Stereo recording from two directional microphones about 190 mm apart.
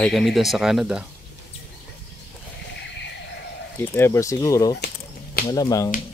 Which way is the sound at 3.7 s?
10° left (ahead or behind).